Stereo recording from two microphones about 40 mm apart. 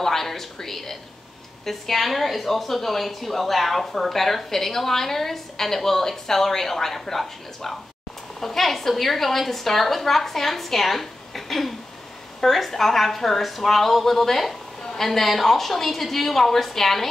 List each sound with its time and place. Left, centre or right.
0.0 s a woman's voice: centre
14.8 s a sound: centre
15.0 s a woman's voice: centre